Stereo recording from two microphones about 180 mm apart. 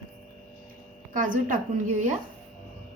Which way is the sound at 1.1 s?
45° right (ahead or behind).